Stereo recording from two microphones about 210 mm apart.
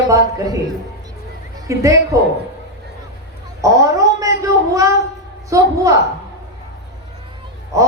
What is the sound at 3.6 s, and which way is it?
A man's voice, 15° right (ahead or behind).